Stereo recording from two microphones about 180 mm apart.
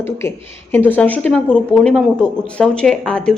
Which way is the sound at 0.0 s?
15° left (ahead or behind).